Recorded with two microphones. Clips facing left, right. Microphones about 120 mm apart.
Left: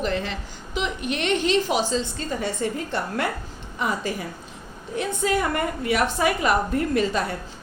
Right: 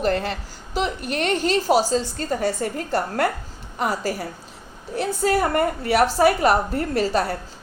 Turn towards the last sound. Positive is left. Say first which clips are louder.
# right 2 dB
turn(degrees=-35)  # may be behind; listen again after turning